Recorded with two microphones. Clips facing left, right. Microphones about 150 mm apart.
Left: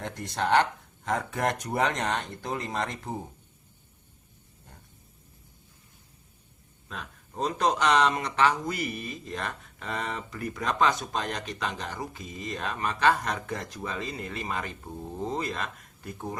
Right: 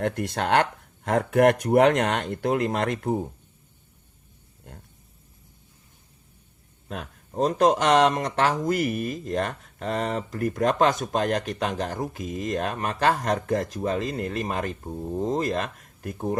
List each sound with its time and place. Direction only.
0.0 s speech: 55° right (ahead or behind)
6.8 s speech: 50° right (ahead or behind)